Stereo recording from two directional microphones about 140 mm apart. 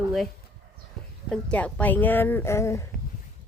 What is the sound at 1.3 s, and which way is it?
Speech, 10° left (ahead or behind).